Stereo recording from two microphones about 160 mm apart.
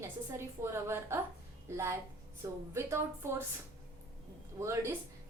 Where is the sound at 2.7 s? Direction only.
15° right (ahead or behind).